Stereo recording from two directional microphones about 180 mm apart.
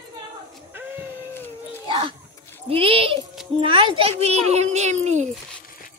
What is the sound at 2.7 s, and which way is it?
A child's voice, 30° right (ahead or behind).